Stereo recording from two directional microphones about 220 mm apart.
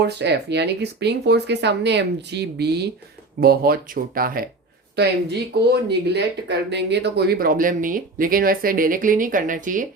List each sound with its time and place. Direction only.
0.0 s speech: 50° right (ahead or behind)
5.5 s speech: 50° right (ahead or behind)